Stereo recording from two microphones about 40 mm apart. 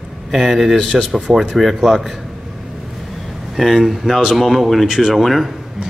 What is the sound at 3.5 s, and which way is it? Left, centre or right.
Speech, centre.